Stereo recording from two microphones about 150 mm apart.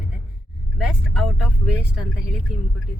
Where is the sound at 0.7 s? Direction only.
Centre (ahead or behind).